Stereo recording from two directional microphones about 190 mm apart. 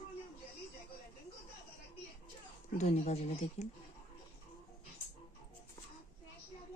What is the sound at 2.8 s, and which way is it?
Speech, 35° left (ahead or behind).